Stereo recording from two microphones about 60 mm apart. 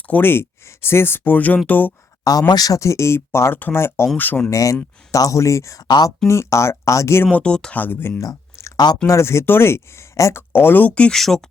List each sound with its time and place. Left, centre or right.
0.1 s speech: left
2.3 s speech: left
4.2 s speech: left
4.4 s speech: left
6.2 s speech: left
7.3 s speech: centre
7.8 s speech: left
9.0 s speech: left
10.3 s speech: left
11.1 s speech: centre